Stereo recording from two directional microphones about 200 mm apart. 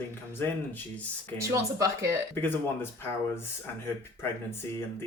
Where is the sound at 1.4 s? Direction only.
15° right (ahead or behind).